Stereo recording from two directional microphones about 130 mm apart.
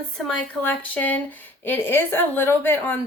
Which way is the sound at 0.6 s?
15° left (ahead or behind).